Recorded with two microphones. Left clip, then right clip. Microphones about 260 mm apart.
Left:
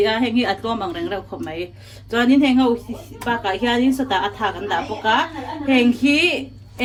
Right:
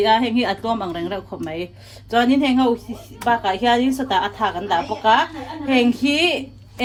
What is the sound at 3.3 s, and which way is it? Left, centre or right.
Speech, centre.